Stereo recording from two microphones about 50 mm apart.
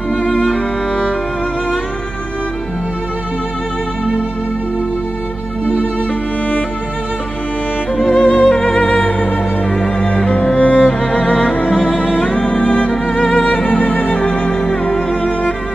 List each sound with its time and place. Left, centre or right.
0.2 s music: left
8.1 s music: left
8.5 s music: centre
10.3 s music: left
12.2 s music: centre
12.9 s music: centre
13.7 s music: left
14.6 s music: centre